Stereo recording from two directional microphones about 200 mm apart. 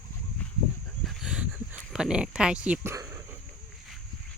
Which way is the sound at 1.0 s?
Centre (ahead or behind).